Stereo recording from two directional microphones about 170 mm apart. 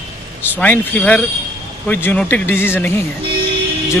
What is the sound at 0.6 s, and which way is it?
Speech, 10° left (ahead or behind).